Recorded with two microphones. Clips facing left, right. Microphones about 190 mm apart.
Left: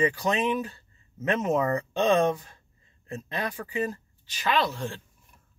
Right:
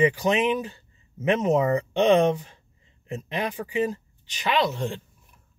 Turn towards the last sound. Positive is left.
turn(degrees=-20)  # may be behind; listen again after turning